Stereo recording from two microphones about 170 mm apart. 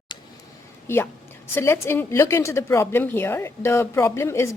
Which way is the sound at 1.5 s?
15° left (ahead or behind).